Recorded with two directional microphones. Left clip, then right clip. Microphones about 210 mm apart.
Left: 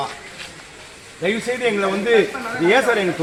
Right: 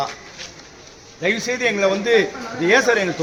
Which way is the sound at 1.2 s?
10° right (ahead or behind).